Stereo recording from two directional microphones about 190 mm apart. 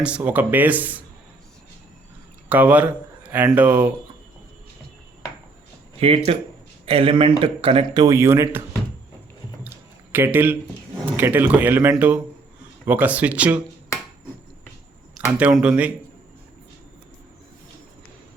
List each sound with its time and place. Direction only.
0.0 s speech: 5° right (ahead or behind)
2.5 s speech: 10° right (ahead or behind)
6.0 s speech: 30° right (ahead or behind); by 8.6 s 15° right (ahead or behind)
9.6 s a sound: 10° right (ahead or behind)
11.2 s speech: 10° right (ahead or behind)
15.3 s speech: 5° right (ahead or behind)